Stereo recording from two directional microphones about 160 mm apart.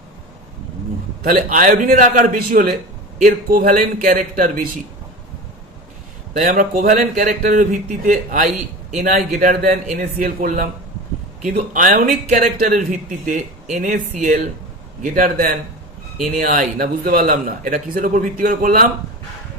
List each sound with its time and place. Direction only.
1.2 s a man's voice: 60° right (ahead or behind)
6.3 s a man's voice: 55° right (ahead or behind)